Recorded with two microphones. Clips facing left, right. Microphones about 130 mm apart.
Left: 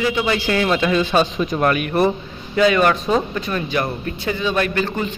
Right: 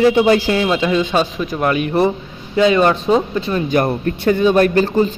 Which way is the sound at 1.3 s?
5° right (ahead or behind).